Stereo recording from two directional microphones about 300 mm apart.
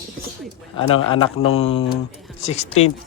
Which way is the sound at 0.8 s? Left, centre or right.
Centre.